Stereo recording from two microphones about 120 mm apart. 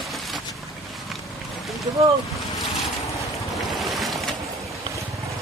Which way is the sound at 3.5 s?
Centre (ahead or behind).